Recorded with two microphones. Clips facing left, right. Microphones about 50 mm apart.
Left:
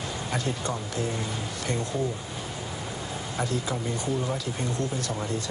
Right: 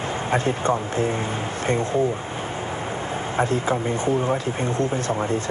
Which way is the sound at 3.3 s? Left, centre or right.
Right.